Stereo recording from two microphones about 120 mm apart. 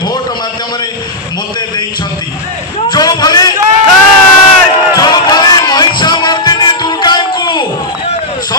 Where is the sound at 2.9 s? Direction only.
35° left (ahead or behind).